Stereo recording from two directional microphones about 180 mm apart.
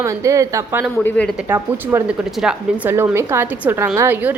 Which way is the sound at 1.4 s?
15° right (ahead or behind).